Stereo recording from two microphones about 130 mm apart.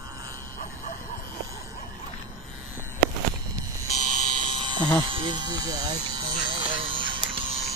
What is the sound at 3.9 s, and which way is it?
Buzzer, 65° right (ahead or behind).